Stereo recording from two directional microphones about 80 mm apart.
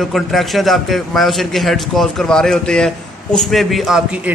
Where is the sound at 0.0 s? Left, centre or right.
Centre.